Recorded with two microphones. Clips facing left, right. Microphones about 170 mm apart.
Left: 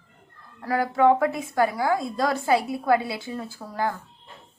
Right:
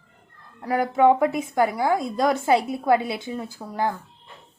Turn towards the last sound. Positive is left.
turn(degrees=-20)  # may be behind; listen again after turning